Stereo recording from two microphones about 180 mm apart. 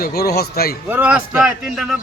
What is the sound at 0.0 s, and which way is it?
Speech, 60° left (ahead or behind).